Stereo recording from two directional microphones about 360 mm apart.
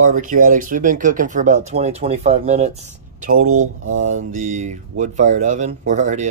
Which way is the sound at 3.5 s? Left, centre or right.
Right.